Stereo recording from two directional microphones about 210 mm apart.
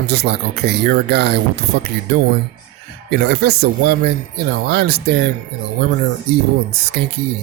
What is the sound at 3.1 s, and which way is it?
Speech, 50° right (ahead or behind).